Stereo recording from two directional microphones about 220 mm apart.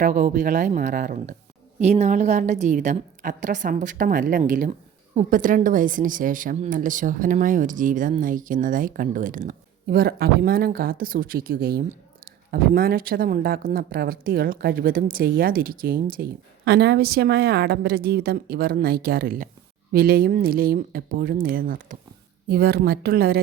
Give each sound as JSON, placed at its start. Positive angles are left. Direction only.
{"t": 0.0, "sound": "a woman's voice", "side_deg": -40}